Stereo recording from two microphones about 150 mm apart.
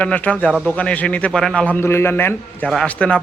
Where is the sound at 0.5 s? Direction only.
Centre (ahead or behind).